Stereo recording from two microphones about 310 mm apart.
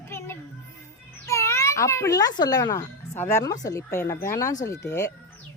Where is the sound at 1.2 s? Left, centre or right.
Centre.